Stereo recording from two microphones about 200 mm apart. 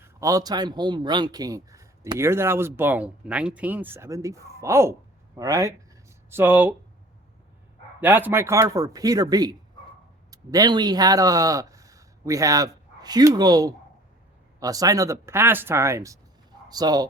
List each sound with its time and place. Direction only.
0.0 s speech: 15° right (ahead or behind)
8.0 s speech: 10° right (ahead or behind)